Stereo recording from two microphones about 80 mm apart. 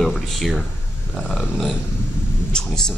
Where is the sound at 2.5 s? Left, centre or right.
Centre.